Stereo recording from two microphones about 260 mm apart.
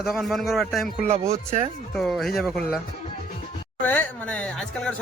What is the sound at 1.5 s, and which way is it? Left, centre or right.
Speech, right.